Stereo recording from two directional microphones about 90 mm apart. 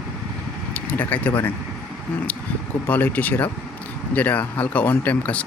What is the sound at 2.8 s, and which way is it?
Speech, 20° left (ahead or behind).